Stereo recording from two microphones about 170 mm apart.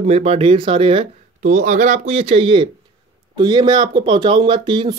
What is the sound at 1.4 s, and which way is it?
Speech, 45° right (ahead or behind).